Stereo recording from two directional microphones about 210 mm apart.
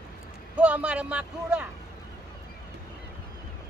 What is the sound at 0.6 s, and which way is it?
A man's voice, 5° right (ahead or behind).